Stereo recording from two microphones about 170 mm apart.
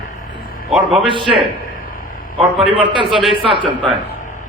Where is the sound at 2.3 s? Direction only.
30° right (ahead or behind).